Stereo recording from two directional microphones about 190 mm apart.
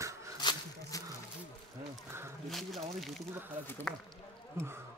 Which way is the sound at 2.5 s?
Centre (ahead or behind).